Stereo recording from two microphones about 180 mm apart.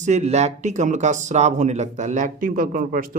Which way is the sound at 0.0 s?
40° right (ahead or behind).